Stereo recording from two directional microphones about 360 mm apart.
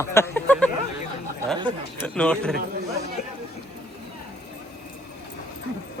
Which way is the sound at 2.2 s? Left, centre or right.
Centre.